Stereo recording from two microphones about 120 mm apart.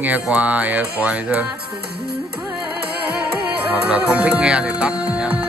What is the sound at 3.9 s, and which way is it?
Music, 10° right (ahead or behind).